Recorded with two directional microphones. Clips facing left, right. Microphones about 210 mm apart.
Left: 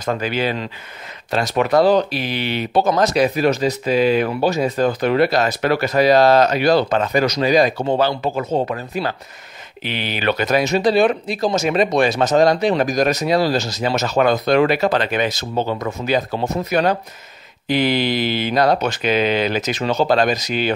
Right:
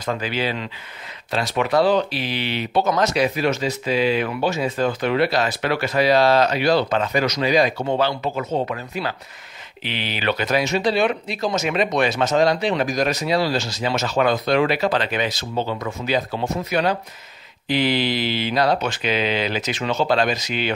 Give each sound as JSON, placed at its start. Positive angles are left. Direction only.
{"t": 0.0, "sound": "speech", "side_deg": 45}
{"t": 2.8, "sound": "speech", "side_deg": 35}